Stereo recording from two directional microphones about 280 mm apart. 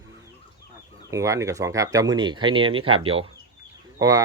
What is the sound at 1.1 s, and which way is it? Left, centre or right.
Speech, centre.